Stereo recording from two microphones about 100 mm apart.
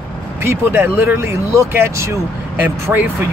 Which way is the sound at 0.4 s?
25° right (ahead or behind).